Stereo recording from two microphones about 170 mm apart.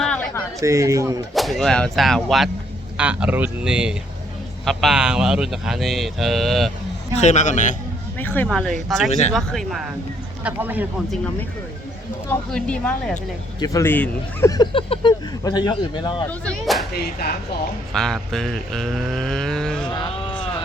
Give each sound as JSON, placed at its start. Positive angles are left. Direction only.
{"t": 0.0, "sound": "a sound", "side_deg": 5}
{"t": 0.6, "sound": "speech", "side_deg": -15}
{"t": 1.3, "sound": "speech", "side_deg": 0}
{"t": 7.2, "sound": "a man's voice", "side_deg": 45}
{"t": 8.2, "sound": "speech", "side_deg": 10}
{"t": 10.4, "sound": "speech", "side_deg": -10}
{"t": 12.3, "sound": "speech", "side_deg": 5}
{"t": 14.5, "sound": "speech", "side_deg": 30}
{"t": 16.5, "sound": "speech", "side_deg": 0}
{"t": 16.9, "sound": "speech", "side_deg": 65}
{"t": 17.9, "sound": "speech", "side_deg": 5}
{"t": 19.9, "sound": "speech", "side_deg": 25}